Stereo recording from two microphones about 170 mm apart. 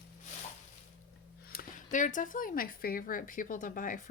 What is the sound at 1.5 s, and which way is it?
Speech, 55° left (ahead or behind).